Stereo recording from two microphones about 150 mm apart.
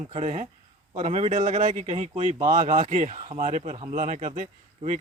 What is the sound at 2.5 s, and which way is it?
Speech, 60° right (ahead or behind).